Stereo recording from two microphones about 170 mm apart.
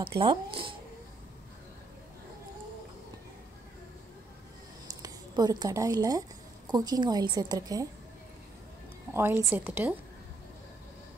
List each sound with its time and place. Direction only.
0.2 s a woman's voice: 30° right (ahead or behind)
4.8 s a sound: 25° right (ahead or behind)
6.7 s a woman's voice: 25° right (ahead or behind)
9.1 s a woman's voice: 15° right (ahead or behind)